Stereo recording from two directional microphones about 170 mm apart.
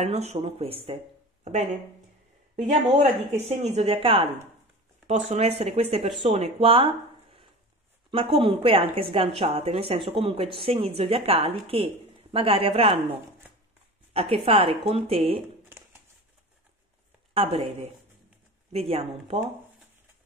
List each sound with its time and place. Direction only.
0.0 s a woman's voice: 40° right (ahead or behind)
8.1 s a woman's voice: 30° right (ahead or behind)
14.1 s a woman's voice: 35° right (ahead or behind)
17.3 s a woman's voice: 35° right (ahead or behind)